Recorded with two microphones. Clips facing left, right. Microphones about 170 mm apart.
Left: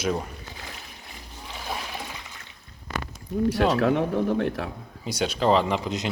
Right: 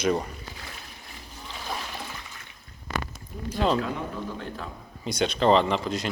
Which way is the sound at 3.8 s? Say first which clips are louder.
Left 10 dB; 75° left (ahead or behind).